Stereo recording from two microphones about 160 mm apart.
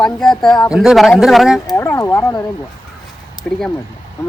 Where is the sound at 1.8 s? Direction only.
15° left (ahead or behind).